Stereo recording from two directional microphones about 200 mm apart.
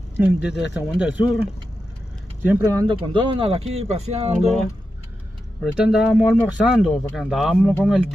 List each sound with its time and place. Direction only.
0.2 s speech: 5° right (ahead or behind)
2.5 s speech: 15° right (ahead or behind); by 4.5 s 30° right (ahead or behind)
5.6 s speech: 5° right (ahead or behind)